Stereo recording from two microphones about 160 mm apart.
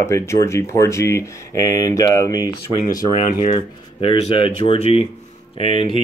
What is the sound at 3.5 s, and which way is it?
Speech, 35° left (ahead or behind).